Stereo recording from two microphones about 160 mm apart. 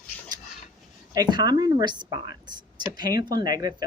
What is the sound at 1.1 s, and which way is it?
Speech, 25° right (ahead or behind).